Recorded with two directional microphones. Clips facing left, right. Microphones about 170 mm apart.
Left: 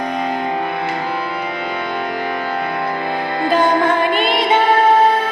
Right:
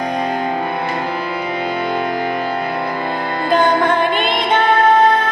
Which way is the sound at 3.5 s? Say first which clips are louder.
Right 1 dB; 5° left (ahead or behind).